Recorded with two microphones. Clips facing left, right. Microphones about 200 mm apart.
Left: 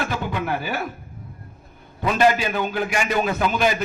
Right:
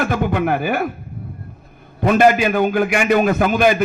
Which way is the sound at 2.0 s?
50° right (ahead or behind).